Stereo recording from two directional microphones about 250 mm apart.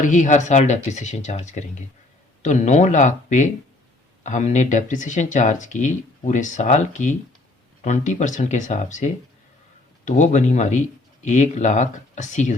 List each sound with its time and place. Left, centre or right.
0.0 s speech: left
10.1 s speech: left